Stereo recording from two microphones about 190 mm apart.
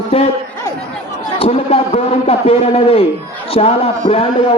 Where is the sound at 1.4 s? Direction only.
30° left (ahead or behind).